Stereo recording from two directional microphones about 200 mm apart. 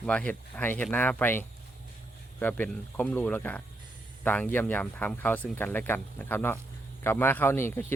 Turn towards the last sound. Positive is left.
turn(degrees=10)  # may be behind; listen again after turning